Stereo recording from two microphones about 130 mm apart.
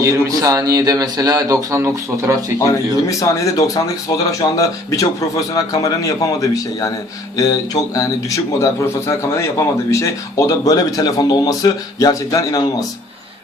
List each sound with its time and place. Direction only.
0.0 s speech: 25° right (ahead or behind)
3.1 s a man's voice: 25° left (ahead or behind)